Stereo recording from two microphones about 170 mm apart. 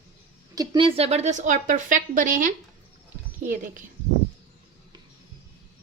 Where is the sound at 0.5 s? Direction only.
30° right (ahead or behind); by 2.5 s 50° right (ahead or behind).